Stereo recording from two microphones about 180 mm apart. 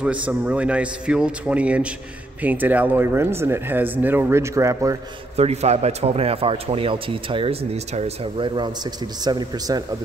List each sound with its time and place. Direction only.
0.0 s speech: 10° right (ahead or behind)
5.3 s a man's voice: 35° right (ahead or behind)